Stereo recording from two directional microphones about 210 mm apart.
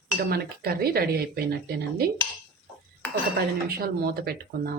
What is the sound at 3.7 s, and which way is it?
Cutlery, 45° right (ahead or behind).